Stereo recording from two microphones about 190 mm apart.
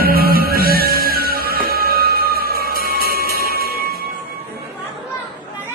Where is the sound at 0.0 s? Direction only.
50° right (ahead or behind).